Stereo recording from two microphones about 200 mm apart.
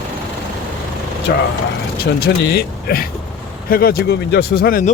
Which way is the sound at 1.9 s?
50° left (ahead or behind).